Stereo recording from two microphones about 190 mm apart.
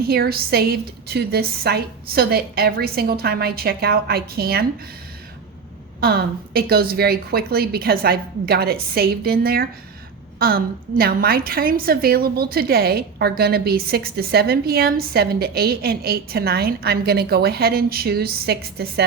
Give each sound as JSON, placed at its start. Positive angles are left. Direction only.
{"t": 0.0, "sound": "a woman's voice", "side_deg": -55}
{"t": 6.0, "sound": "a woman's voice", "side_deg": -55}